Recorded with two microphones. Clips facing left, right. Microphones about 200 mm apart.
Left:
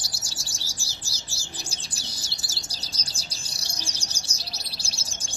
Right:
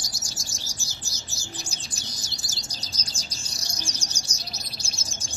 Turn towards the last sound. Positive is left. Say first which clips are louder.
# right 1 dB
turn(degrees=30)  # may be behind; listen again after turning